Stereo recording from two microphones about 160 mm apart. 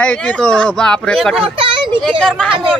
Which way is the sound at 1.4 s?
35° right (ahead or behind).